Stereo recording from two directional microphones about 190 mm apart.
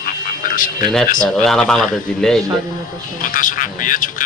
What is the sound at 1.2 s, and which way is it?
Speech, 5° left (ahead or behind).